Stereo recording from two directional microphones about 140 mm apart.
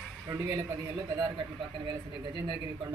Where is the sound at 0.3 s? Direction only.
20° right (ahead or behind).